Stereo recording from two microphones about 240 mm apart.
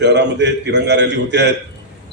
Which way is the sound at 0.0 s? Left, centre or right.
Right.